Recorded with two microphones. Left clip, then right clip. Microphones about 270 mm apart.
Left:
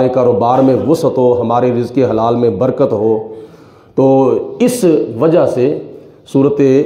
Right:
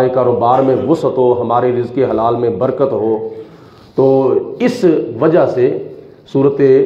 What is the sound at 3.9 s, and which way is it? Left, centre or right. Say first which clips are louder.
A man's voice: left 1 dB; left.